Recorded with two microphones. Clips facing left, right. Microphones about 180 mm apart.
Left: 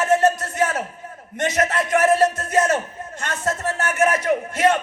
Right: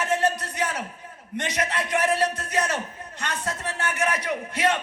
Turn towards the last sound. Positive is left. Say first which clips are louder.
# left 6 dB
turn(degrees=45)  # may be behind; listen again after turning